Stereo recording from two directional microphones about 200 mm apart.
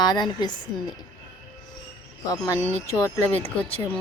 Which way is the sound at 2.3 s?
15° left (ahead or behind).